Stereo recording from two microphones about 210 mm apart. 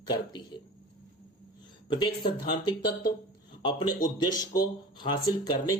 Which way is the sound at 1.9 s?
20° left (ahead or behind).